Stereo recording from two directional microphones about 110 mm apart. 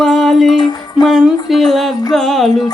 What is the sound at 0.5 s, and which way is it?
Music, 40° left (ahead or behind).